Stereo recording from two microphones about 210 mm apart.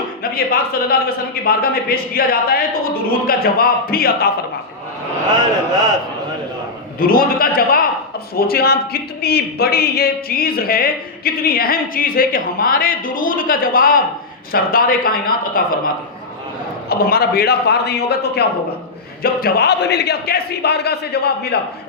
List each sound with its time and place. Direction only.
0.2 s speech: 45° left (ahead or behind)
7.0 s speech: 45° left (ahead or behind)
16.9 s speech: 45° left (ahead or behind)